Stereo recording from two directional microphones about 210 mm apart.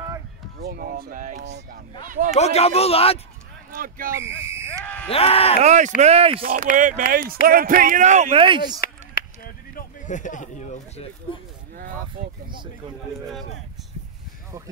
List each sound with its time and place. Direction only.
0.6 s speech: 45° right (ahead or behind)
1.4 s speech: 50° right (ahead or behind)
2.0 s speech: 40° right (ahead or behind)
2.3 s speech: 30° left (ahead or behind)
3.7 s speech: 40° right (ahead or behind)
4.1 s speech: 10° right (ahead or behind)
4.8 s speech: 5° left (ahead or behind)
5.1 s speech: 30° left (ahead or behind)
5.6 s speech: 35° right (ahead or behind)
6.4 s speech: 40° right (ahead or behind); by 8.8 s 20° right (ahead or behind)
8.8 s chop: 45° left (ahead or behind)
12.2 s speech: 40° right (ahead or behind)